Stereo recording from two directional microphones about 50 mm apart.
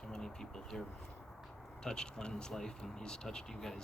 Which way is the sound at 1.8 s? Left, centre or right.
Centre.